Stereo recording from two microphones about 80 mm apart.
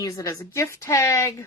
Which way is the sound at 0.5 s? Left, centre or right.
Left.